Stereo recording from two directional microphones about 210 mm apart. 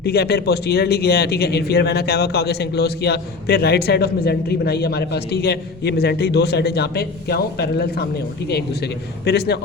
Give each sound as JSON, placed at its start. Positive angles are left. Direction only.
{"t": 0.0, "sound": "speech", "side_deg": 50}